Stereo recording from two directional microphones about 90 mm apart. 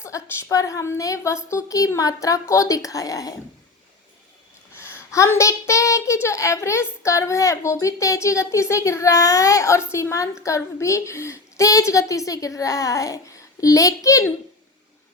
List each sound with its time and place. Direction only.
0.0 s a child's voice: 35° left (ahead or behind)
4.8 s a child's voice: 30° left (ahead or behind)